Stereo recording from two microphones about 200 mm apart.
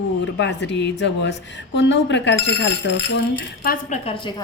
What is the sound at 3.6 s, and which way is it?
Speech, 45° left (ahead or behind).